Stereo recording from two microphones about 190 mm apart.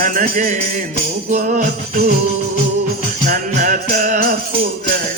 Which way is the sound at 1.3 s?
40° right (ahead or behind).